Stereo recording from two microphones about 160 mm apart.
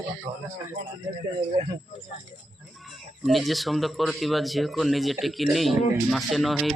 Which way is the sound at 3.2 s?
Centre (ahead or behind).